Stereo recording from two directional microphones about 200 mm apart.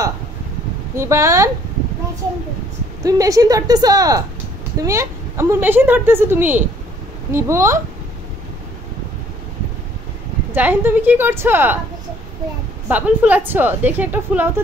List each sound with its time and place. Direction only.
0.9 s a woman's voice: 15° right (ahead or behind)
3.0 s a woman's voice: 15° right (ahead or behind)
10.5 s a woman's voice: 10° right (ahead or behind)
12.8 s a woman's voice: 5° right (ahead or behind)